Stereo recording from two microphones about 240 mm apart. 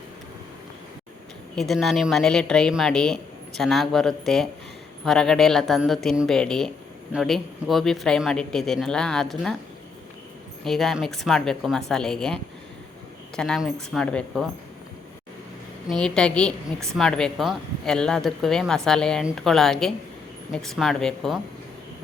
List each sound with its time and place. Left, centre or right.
1.5 s a woman's voice: centre
10.6 s a woman's voice: centre
15.9 s a woman's voice: centre